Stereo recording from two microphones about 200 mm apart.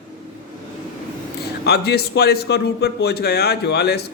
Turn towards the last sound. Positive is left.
turn(degrees=55)  # may be behind; listen again after turning